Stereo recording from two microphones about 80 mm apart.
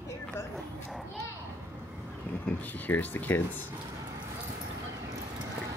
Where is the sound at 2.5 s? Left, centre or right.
Left.